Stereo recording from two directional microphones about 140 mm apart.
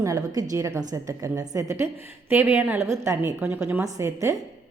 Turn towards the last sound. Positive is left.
turn(degrees=-20)  # may be behind; listen again after turning